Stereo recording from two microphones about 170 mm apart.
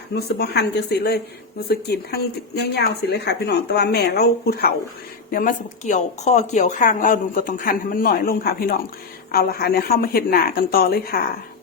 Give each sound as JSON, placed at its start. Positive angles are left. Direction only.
{"t": 0.1, "sound": "speech", "side_deg": 75}
{"t": 5.3, "sound": "speech", "side_deg": 55}